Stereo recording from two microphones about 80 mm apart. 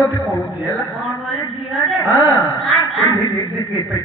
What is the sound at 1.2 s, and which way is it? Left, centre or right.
Speech, centre.